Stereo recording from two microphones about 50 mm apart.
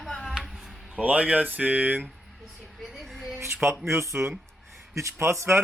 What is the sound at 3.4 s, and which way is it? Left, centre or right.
Speech, right.